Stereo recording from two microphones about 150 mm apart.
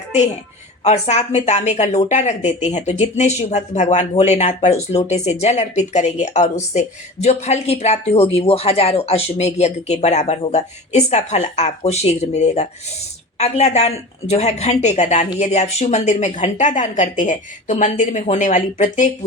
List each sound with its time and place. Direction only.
0.9 s speech: 50° left (ahead or behind)